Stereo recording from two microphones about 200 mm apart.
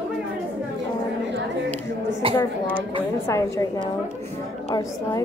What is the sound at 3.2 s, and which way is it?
A woman's voice, 15° left (ahead or behind).